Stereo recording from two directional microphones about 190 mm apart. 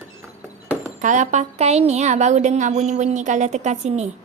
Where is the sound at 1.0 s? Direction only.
40° right (ahead or behind).